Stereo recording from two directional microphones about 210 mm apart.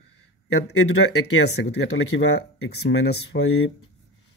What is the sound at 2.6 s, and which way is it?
Speech, 60° left (ahead or behind).